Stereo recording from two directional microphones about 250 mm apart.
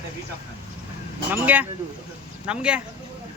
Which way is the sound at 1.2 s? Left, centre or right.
Centre.